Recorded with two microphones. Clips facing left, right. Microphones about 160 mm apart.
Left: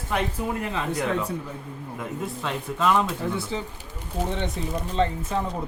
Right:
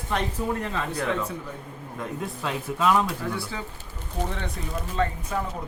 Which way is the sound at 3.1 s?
20° left (ahead or behind).